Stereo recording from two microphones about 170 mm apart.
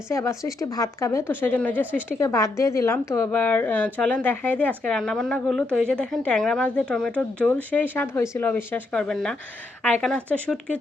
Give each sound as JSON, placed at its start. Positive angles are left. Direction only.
{"t": 0.1, "sound": "a woman's voice", "side_deg": 15}
{"t": 1.9, "sound": "a woman's voice", "side_deg": -10}
{"t": 2.1, "sound": "a woman's voice", "side_deg": 20}